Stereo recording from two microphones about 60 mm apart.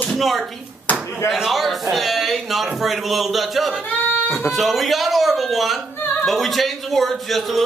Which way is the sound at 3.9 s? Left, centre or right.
Left.